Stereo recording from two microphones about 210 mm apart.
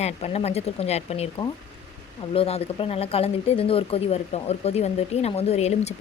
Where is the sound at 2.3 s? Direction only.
25° left (ahead or behind).